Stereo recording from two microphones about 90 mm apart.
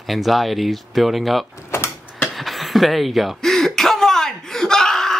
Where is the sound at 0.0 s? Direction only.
Centre (ahead or behind).